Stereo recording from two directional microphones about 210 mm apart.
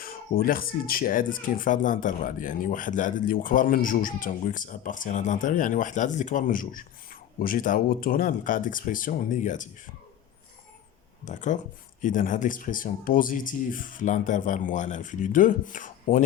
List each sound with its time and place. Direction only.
0.0 s speech: 45° left (ahead or behind)
11.3 s speech: 35° left (ahead or behind)